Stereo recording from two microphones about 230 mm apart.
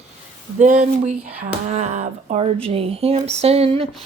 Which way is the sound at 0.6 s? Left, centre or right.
Right.